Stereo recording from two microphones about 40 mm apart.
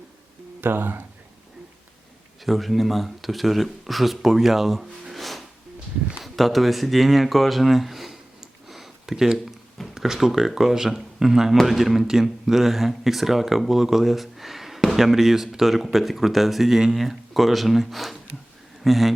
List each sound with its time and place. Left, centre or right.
0.6 s speech: right
2.4 s speech: centre
8.6 s a sound: centre
9.9 s a man's voice: centre